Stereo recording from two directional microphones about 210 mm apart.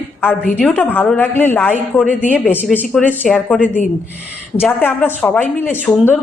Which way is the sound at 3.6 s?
40° left (ahead or behind).